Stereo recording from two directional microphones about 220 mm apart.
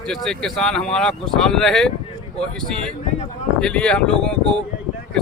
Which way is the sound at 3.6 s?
5° left (ahead or behind).